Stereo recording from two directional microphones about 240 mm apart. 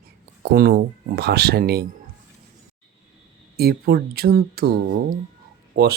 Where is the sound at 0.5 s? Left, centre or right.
Right.